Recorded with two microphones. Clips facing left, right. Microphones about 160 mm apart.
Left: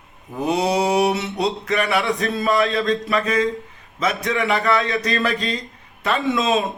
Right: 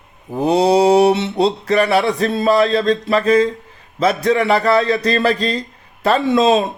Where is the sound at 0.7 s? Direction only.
35° right (ahead or behind).